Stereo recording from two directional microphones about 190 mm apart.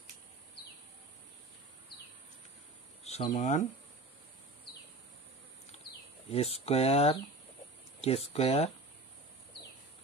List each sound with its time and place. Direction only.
3.0 s speech: 35° left (ahead or behind)
6.2 s speech: 30° left (ahead or behind)